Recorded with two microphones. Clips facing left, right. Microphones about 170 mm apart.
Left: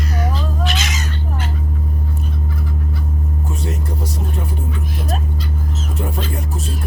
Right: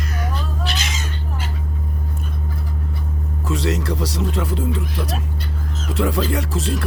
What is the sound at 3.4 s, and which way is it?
Music, 90° right.